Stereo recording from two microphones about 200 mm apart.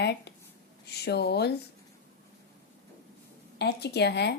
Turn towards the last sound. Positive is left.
turn(degrees=55)  # may be behind; listen again after turning